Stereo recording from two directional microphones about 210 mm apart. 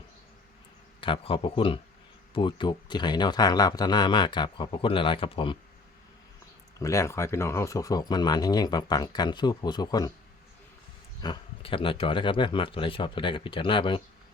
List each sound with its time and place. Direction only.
1.0 s speech: 25° left (ahead or behind)
6.7 s speech: 15° left (ahead or behind)
11.2 s speech: 25° left (ahead or behind)